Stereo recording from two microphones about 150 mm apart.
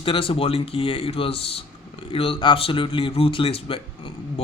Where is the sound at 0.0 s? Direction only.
35° left (ahead or behind).